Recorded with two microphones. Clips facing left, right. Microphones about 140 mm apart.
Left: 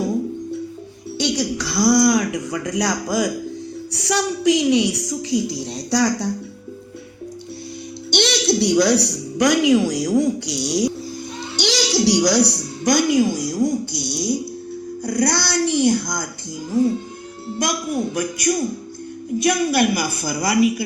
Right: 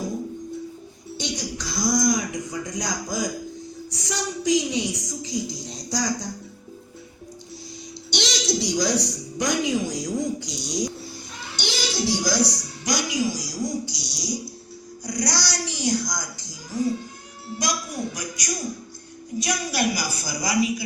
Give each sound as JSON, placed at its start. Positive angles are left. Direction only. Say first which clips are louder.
{"t": 1.2, "sound": "a woman's voice", "louder": "left 9 dB", "side_deg": 70}
{"t": 8.1, "sound": "a woman's voice", "louder": "left 7 dB", "side_deg": 60}
{"t": 11.5, "sound": "a woman's voice", "louder": "left 8 dB", "side_deg": 85}